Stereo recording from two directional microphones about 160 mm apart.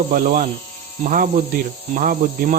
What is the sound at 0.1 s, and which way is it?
Speech, 60° right (ahead or behind).